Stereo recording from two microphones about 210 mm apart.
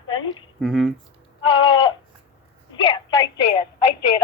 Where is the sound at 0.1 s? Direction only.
20° left (ahead or behind).